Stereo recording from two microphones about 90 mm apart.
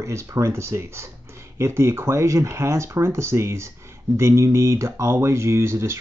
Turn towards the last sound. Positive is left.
turn(degrees=-30)  # may be behind; listen again after turning